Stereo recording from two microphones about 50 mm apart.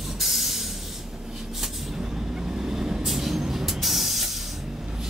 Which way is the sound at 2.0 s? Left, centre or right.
Centre.